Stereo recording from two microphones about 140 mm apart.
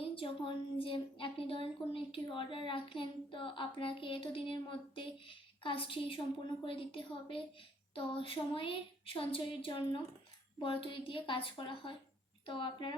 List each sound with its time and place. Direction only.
0.0 s a woman's voice: 40° left (ahead or behind)